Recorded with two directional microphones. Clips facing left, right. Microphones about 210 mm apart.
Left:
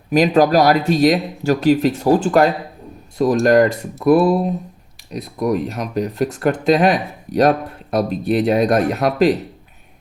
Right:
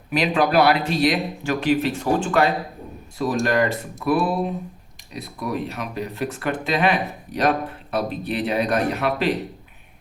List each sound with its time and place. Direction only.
0.1 s speech: 40° left (ahead or behind)